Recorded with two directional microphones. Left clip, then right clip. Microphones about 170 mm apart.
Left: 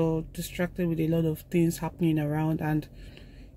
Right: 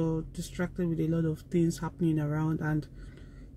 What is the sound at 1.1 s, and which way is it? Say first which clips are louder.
Speech: left 3 dB; 5° right (ahead or behind).